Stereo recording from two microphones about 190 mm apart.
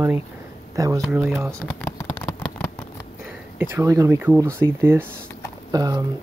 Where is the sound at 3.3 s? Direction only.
10° right (ahead or behind).